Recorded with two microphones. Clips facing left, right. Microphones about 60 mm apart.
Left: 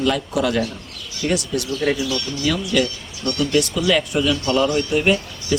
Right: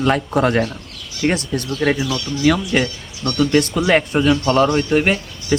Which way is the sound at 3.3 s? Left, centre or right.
Right.